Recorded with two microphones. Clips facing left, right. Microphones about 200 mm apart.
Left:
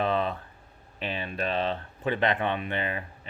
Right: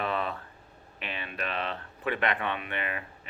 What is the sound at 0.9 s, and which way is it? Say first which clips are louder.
Speech: left 5 dB; 35° left (ahead or behind).